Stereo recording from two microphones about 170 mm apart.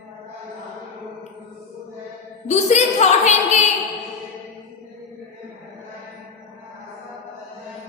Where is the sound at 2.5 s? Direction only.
40° left (ahead or behind).